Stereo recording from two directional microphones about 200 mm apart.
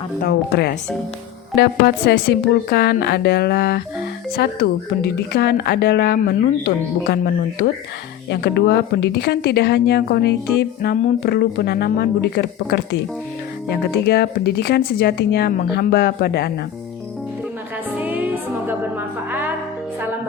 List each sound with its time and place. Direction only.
0.2 s a woman's voice: 55° left (ahead or behind)
8.3 s speech: 55° left (ahead or behind)
14.0 s speech: 55° left (ahead or behind)
18.0 s music: 10° right (ahead or behind)